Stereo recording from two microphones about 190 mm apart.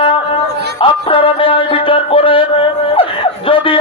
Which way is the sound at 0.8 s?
25° left (ahead or behind).